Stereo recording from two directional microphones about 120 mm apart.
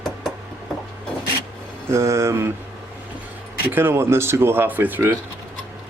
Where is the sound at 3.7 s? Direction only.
20° right (ahead or behind).